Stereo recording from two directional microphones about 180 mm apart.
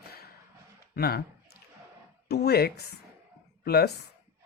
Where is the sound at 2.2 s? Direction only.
65° left (ahead or behind).